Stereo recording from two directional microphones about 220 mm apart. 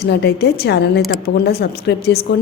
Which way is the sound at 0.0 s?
50° left (ahead or behind).